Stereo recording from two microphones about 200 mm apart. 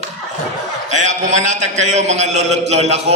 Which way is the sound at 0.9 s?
35° right (ahead or behind).